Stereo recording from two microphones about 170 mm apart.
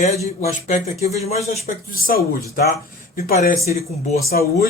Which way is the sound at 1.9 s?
55° left (ahead or behind).